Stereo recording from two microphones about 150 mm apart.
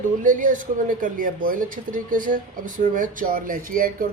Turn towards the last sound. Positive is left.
turn(degrees=-70)  # may be behind; listen again after turning